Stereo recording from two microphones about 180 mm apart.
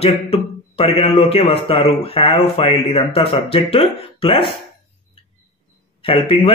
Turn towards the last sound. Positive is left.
turn(degrees=30)  # may be behind; listen again after turning